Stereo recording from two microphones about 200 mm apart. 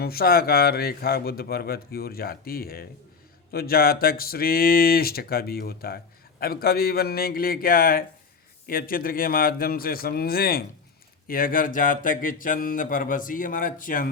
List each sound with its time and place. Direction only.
0.0 s speech: 50° left (ahead or behind)